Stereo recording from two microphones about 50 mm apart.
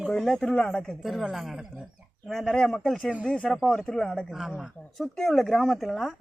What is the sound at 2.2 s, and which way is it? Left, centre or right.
Speech, centre.